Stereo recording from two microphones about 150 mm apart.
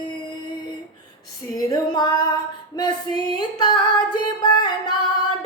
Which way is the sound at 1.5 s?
25° left (ahead or behind).